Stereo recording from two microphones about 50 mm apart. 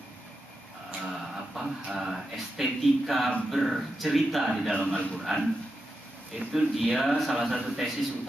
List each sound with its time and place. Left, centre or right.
1.0 s speech: centre
4.7 s a man's voice: centre
5.2 s speech: centre